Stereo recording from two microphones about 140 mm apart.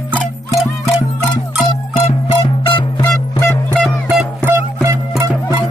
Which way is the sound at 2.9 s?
30° left (ahead or behind).